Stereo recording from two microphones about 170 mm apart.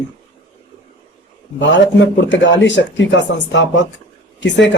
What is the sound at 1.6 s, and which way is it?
A man's voice, 90° left.